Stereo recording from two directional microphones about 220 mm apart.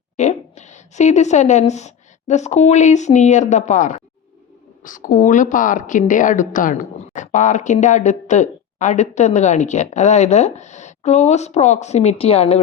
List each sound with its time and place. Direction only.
0.2 s a woman's voice: 30° left (ahead or behind)